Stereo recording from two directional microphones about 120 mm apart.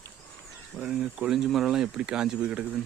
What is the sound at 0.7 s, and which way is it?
Speech, 5° right (ahead or behind).